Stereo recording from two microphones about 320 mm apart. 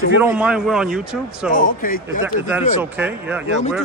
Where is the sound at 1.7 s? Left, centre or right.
Left.